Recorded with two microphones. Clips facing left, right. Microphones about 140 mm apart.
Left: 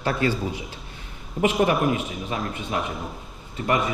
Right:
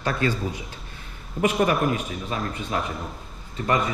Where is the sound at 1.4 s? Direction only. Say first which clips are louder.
Left 1 dB; 20° left (ahead or behind).